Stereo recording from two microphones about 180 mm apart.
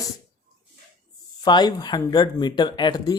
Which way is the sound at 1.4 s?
25° left (ahead or behind).